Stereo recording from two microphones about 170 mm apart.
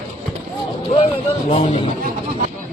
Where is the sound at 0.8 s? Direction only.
35° left (ahead or behind).